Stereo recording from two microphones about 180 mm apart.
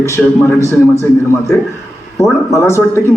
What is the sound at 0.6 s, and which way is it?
Speech, 15° left (ahead or behind).